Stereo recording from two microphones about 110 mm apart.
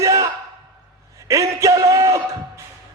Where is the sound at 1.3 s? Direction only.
30° right (ahead or behind).